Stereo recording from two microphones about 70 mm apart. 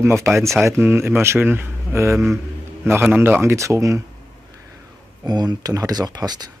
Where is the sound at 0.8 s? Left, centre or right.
Right.